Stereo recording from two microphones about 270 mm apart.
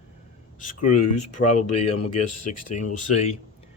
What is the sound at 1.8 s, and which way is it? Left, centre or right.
Speech, left.